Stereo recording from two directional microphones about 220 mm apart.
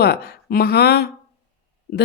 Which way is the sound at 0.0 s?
45° left (ahead or behind).